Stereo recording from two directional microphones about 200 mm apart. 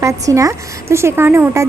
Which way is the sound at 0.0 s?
15° right (ahead or behind).